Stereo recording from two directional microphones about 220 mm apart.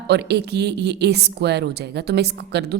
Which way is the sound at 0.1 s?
50° right (ahead or behind).